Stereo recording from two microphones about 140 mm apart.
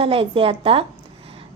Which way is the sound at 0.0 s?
40° right (ahead or behind).